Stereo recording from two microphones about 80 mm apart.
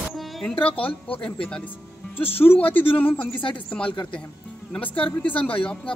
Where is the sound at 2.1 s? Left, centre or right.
Left.